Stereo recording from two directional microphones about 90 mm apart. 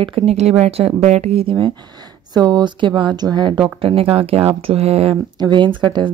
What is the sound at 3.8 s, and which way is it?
Speech, 90° right.